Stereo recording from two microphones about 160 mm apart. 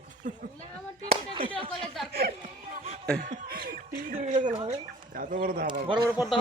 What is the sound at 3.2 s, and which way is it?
Speech, 60° right (ahead or behind).